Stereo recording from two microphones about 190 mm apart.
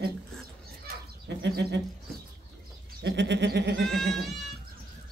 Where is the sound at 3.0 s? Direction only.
65° right (ahead or behind).